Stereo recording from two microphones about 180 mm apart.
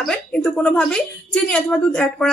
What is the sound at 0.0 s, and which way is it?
A woman's voice, 5° left (ahead or behind).